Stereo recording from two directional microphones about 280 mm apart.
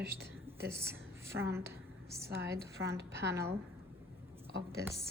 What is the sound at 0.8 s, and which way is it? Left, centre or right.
A woman's voice, centre.